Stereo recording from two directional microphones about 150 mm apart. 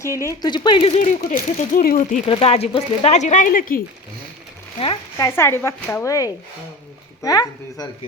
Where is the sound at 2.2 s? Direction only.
40° left (ahead or behind); by 3.8 s 70° left (ahead or behind).